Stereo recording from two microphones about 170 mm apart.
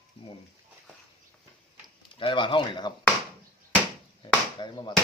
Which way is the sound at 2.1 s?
30° left (ahead or behind).